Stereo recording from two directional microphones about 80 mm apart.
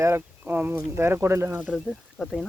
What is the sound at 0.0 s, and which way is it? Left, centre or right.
Speech, right.